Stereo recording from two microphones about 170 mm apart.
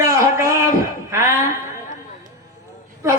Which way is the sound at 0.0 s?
15° right (ahead or behind).